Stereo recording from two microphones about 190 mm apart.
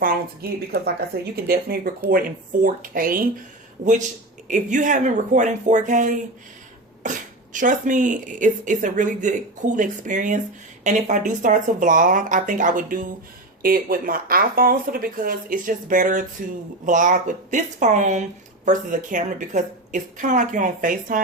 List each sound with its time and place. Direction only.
0.7 s speech: 55° right (ahead or behind)